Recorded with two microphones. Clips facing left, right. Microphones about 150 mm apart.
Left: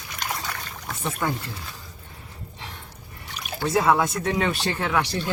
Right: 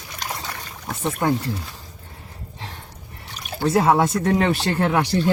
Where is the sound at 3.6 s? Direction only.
30° right (ahead or behind).